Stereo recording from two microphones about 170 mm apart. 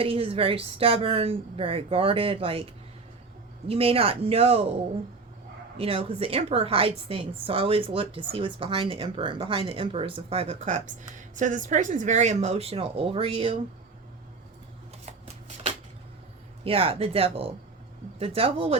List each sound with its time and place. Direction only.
0.0 s a woman's voice: 35° right (ahead or behind)
3.7 s a woman's voice: 35° right (ahead or behind)
5.7 s a woman's voice: 35° right (ahead or behind)
15.0 s shuffling cards: 40° right (ahead or behind)
16.6 s a woman's voice: 35° right (ahead or behind)